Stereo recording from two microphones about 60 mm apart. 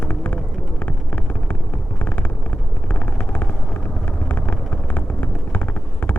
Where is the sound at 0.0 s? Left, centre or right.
Left.